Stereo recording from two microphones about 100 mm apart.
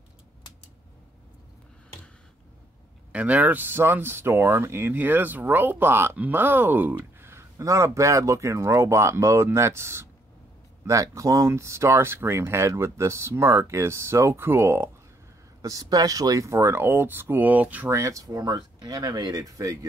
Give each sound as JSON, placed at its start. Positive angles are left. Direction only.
{"t": 3.1, "sound": "speech", "side_deg": -15}
{"t": 15.6, "sound": "speech", "side_deg": -35}
{"t": 17.8, "sound": "speech", "side_deg": -30}